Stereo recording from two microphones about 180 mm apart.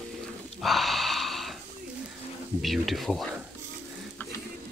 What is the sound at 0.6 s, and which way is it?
Wheeze, centre (ahead or behind).